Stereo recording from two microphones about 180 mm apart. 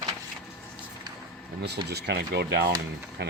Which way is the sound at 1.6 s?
65° right (ahead or behind).